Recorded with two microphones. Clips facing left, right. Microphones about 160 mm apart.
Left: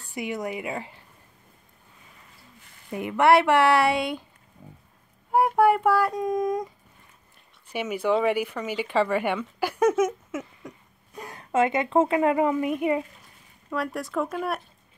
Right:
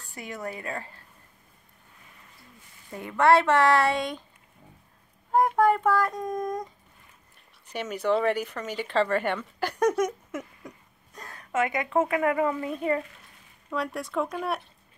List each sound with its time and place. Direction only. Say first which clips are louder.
0.1 s speech: left 6 dB; 15° left (ahead or behind)
2.9 s speech: left 2 dB; 15° left (ahead or behind)
5.3 s speech: left 2 dB; 10° left (ahead or behind)
7.7 s speech: left 2 dB; 10° left (ahead or behind)
11.1 s a sound: left 5 dB; 15° left (ahead or behind)
11.5 s a woman's voice: left 4 dB; 25° left (ahead or behind)
13.7 s speech: left 1 dB; centre (ahead or behind)